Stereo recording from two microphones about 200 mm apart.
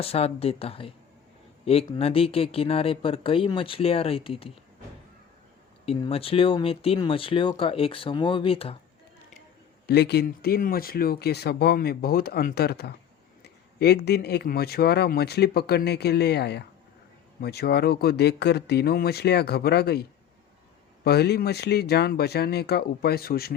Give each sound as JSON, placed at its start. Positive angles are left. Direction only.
{"t": 0.0, "sound": "speech", "side_deg": 30}
{"t": 2.0, "sound": "speech", "side_deg": 30}
{"t": 5.8, "sound": "speech", "side_deg": 30}
{"t": 9.8, "sound": "speech", "side_deg": 55}